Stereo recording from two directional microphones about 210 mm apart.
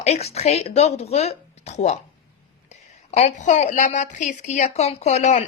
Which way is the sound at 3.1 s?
35° left (ahead or behind).